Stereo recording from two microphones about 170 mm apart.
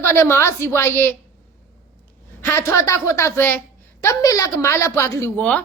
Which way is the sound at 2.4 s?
15° left (ahead or behind).